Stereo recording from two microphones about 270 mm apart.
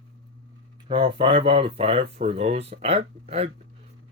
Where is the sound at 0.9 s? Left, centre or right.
Centre.